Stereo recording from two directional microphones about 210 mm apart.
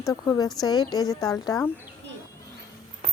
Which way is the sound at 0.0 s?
15° left (ahead or behind).